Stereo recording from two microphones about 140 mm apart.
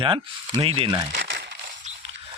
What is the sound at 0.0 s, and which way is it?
Speech, 35° right (ahead or behind).